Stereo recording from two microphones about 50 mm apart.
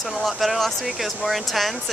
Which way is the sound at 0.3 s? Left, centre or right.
Centre.